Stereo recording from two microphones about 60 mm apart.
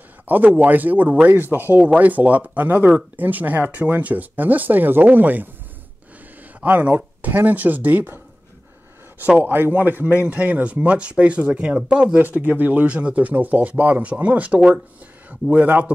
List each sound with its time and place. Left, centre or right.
0.3 s speech: right
6.6 s speech: right
9.4 s speech: right